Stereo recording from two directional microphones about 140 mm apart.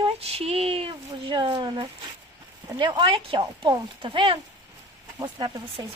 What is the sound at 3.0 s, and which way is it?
A woman's voice, 35° right (ahead or behind).